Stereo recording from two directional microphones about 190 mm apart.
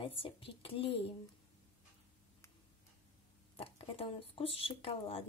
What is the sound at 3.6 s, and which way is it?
Speech, 30° left (ahead or behind).